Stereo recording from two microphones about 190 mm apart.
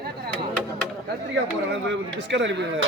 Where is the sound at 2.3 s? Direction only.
70° right (ahead or behind).